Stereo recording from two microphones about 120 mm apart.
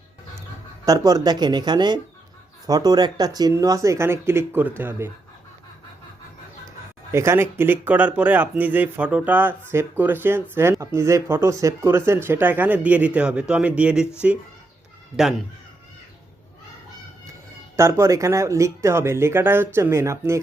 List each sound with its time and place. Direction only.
0.9 s speech: 30° right (ahead or behind)
7.1 s speech: 20° right (ahead or behind)
15.1 s speech: centre (ahead or behind)
17.7 s speech: 25° right (ahead or behind)